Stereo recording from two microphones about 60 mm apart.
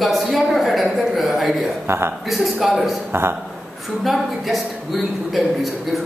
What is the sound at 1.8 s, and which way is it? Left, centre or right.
Speech, right.